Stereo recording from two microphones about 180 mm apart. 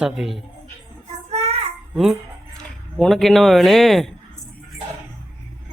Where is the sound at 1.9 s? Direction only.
Centre (ahead or behind).